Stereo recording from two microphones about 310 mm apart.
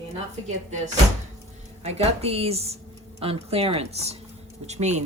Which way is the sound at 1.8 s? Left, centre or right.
Right.